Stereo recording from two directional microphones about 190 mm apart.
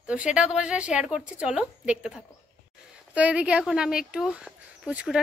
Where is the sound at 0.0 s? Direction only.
5° right (ahead or behind).